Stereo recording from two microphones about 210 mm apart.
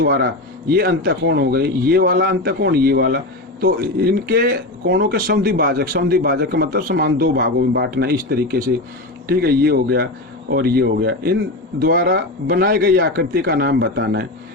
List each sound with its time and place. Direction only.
0.0 s speech: 45° right (ahead or behind)